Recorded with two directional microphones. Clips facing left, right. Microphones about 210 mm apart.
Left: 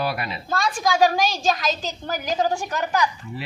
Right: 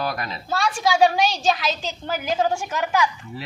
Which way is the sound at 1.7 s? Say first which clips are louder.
Even; 40° left (ahead or behind).